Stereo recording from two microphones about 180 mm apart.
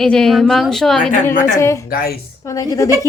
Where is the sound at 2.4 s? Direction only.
20° left (ahead or behind).